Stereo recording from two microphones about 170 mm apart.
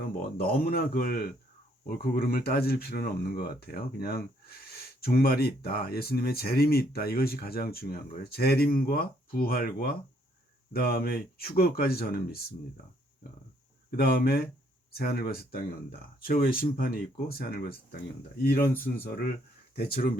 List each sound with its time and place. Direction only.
0.0 s speech: 60° left (ahead or behind)
13.9 s speech: 60° left (ahead or behind)
18.7 s speech: 10° left (ahead or behind)
19.0 s speech: 60° left (ahead or behind)